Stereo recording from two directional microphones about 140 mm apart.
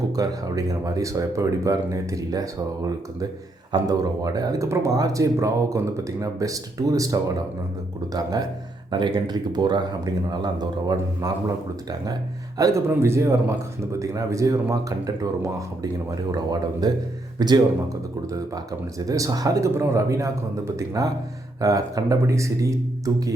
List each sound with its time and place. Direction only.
0.2 s speech: 25° right (ahead or behind)